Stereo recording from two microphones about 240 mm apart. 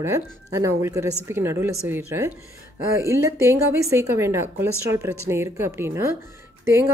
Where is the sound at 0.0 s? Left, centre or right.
Centre.